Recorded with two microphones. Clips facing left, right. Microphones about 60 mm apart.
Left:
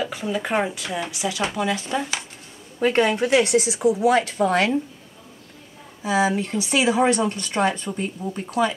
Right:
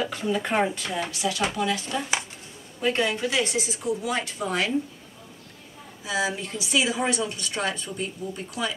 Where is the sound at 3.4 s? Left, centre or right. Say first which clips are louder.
Left 10 dB; left.